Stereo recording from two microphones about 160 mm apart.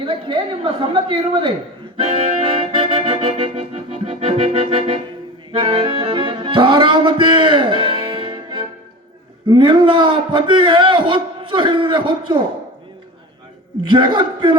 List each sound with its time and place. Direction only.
0.0 s a man's voice: 30° right (ahead or behind)
2.0 s music: 35° right (ahead or behind)
3.5 s organ: 40° right (ahead or behind)
5.5 s music: 35° right (ahead or behind)
9.5 s a man's voice: 35° right (ahead or behind)
13.8 s speech: 30° right (ahead or behind)